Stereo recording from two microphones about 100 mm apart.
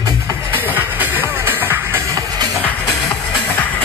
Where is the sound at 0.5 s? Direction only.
20° right (ahead or behind).